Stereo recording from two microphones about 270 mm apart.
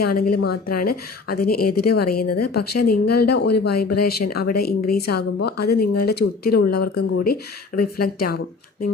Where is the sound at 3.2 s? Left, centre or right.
Left.